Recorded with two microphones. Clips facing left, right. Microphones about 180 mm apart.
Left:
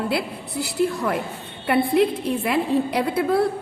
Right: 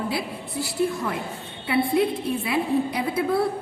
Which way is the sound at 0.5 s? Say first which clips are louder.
Left 2 dB; 70° left (ahead or behind).